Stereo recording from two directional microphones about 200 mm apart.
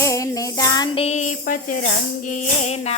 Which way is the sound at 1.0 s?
35° left (ahead or behind).